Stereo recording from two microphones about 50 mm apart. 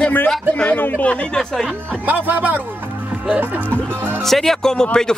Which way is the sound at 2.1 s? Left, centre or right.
Right.